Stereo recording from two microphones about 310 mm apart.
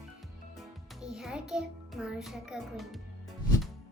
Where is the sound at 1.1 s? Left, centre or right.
Centre.